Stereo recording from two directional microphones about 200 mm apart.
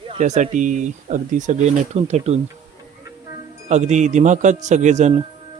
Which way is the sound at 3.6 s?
35° right (ahead or behind).